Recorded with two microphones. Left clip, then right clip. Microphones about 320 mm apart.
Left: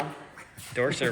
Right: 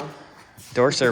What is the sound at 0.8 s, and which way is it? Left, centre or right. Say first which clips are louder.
Speech: right 8 dB; centre.